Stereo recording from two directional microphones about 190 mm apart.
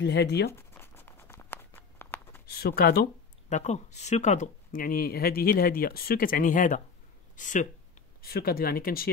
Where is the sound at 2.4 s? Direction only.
55° left (ahead or behind).